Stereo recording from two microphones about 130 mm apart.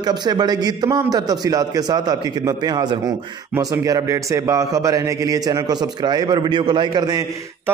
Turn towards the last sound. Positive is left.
turn(degrees=-30)  # may be behind; listen again after turning